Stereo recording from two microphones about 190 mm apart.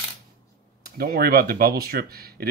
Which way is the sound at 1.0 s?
55° right (ahead or behind).